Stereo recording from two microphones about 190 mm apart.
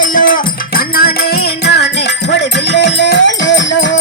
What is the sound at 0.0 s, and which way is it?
Music, 45° left (ahead or behind).